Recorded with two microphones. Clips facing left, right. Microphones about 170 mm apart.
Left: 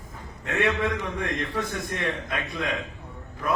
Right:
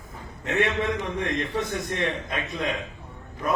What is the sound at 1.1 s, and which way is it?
Speech, 25° right (ahead or behind).